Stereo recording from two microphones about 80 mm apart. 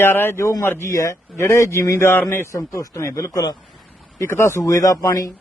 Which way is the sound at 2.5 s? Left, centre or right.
Left.